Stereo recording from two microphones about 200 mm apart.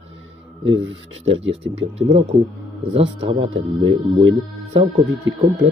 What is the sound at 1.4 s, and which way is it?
Speech, 70° right (ahead or behind).